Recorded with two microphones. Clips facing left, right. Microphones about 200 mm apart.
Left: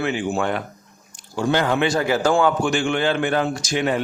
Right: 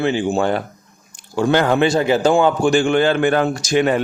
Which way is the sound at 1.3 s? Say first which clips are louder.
Right 4 dB; 60° right (ahead or behind).